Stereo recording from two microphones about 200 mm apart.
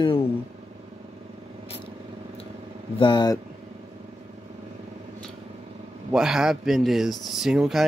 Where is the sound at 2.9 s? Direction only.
25° left (ahead or behind).